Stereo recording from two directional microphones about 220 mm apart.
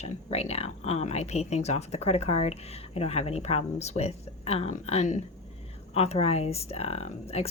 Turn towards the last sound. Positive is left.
turn(degrees=30)  # may be behind; listen again after turning